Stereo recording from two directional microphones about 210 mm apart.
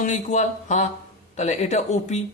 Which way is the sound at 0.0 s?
35° left (ahead or behind).